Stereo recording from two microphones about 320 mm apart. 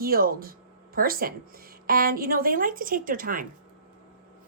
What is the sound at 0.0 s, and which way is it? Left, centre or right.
A woman's voice, right.